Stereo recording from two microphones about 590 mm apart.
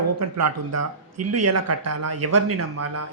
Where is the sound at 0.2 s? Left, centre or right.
Right.